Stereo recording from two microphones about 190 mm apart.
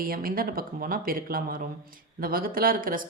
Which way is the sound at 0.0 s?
50° right (ahead or behind).